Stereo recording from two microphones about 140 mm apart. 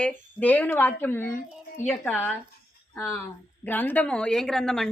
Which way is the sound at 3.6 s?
15° left (ahead or behind).